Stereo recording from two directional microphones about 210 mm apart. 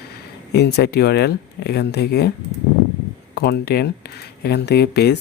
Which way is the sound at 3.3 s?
50° left (ahead or behind).